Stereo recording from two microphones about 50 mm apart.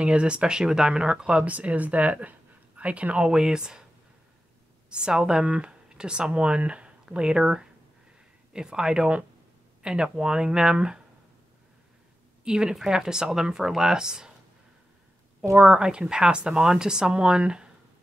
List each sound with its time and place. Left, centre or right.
0.0 s speech: right
1.4 s speech: right
3.3 s speech: centre
4.8 s speech: centre
12.4 s a woman's voice: centre
15.5 s speech: centre